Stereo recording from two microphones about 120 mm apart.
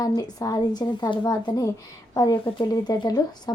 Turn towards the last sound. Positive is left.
turn(degrees=35)  # may be behind; listen again after turning